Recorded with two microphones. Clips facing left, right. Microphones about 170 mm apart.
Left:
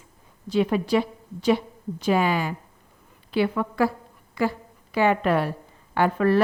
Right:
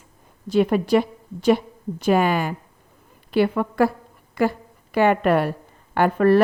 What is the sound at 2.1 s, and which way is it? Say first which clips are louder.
A woman's voice: right 3 dB; 55° right (ahead or behind).